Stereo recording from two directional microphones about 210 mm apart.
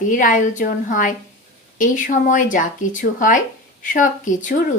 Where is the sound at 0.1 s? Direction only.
40° left (ahead or behind).